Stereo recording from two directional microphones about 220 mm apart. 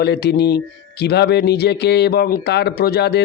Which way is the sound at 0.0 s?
50° left (ahead or behind).